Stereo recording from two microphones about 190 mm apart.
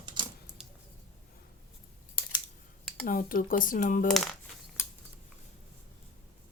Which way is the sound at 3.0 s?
45° left (ahead or behind).